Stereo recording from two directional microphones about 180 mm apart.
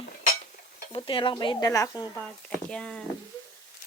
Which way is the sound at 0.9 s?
30° left (ahead or behind).